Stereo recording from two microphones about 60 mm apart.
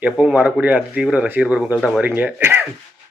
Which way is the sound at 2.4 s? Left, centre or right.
Right.